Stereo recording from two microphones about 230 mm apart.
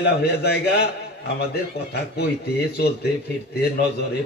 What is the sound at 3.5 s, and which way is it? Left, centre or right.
Speech, left.